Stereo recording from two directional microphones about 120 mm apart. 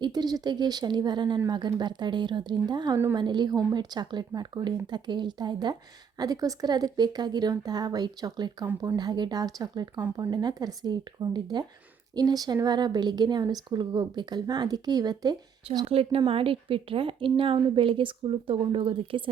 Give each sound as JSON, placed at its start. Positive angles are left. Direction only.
{"t": 0.0, "sound": "a woman's voice", "side_deg": -35}
{"t": 15.9, "sound": "a woman's voice", "side_deg": -55}